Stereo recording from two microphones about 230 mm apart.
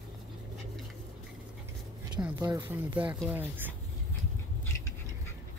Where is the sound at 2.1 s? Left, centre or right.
Centre.